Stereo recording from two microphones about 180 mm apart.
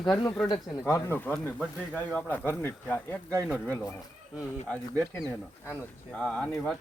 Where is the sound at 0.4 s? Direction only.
25° left (ahead or behind).